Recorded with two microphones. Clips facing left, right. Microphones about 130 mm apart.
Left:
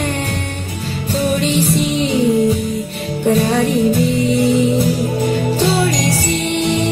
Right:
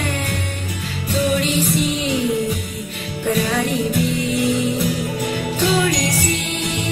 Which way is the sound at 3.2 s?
35° left (ahead or behind).